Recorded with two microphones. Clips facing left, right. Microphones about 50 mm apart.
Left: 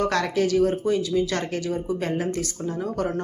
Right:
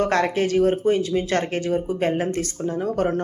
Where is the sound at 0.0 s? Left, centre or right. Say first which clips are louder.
Right 2 dB; right.